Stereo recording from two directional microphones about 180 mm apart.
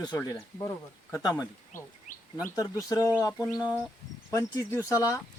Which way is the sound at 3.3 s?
5° right (ahead or behind).